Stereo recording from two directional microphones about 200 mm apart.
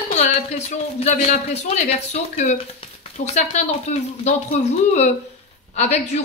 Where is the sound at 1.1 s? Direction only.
35° left (ahead or behind).